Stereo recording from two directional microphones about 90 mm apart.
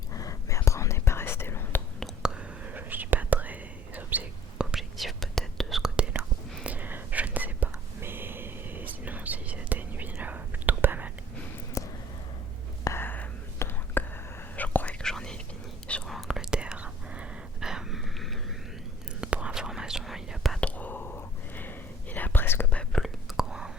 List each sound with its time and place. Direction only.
0.1 s whispering: 40° left (ahead or behind)
2.2 s whispering: 15° right (ahead or behind)
4.7 s whispering: centre (ahead or behind)
6.7 s whispering: 20° right (ahead or behind)
11.8 s a sound: 35° left (ahead or behind)
12.8 s whispering: 25° left (ahead or behind)
15.0 s whispering: 10° left (ahead or behind)
16.0 s whispering: 5° right (ahead or behind)
19.2 s whispering: 15° right (ahead or behind)
20.6 s whispering: 15° left (ahead or behind)
22.7 s whispering: 10° left (ahead or behind)